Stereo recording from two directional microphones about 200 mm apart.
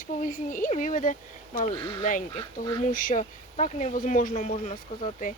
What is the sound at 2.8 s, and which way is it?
Speech, 40° left (ahead or behind).